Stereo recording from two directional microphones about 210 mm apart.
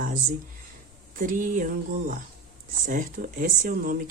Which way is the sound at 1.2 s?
40° right (ahead or behind).